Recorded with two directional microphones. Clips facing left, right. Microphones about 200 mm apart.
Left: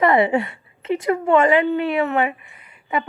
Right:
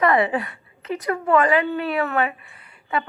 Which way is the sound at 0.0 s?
25° left (ahead or behind).